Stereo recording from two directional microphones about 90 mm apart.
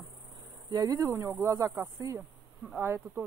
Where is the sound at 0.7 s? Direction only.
45° right (ahead or behind).